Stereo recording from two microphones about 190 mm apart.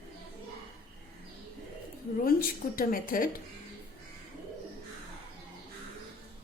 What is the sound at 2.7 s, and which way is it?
Speech, 45° left (ahead or behind).